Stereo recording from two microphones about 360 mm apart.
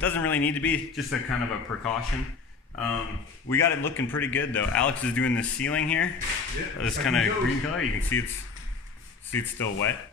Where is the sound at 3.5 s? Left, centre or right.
Centre.